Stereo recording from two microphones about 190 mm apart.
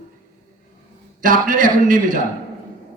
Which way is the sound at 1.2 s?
45° right (ahead or behind).